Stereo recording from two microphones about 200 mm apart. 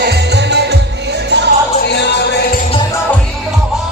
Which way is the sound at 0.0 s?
55° right (ahead or behind).